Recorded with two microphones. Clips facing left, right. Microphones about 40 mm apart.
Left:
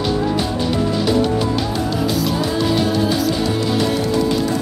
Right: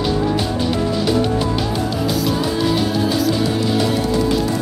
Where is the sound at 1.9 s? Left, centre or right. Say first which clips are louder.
Even; centre.